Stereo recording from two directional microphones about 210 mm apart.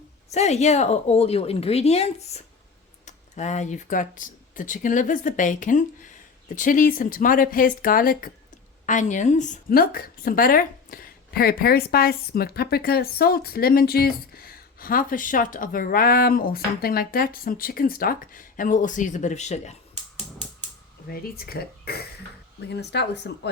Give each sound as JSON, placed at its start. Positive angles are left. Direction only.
{"t": 0.3, "sound": "a woman's voice", "side_deg": 30}
{"t": 21.1, "sound": "a woman's voice", "side_deg": 45}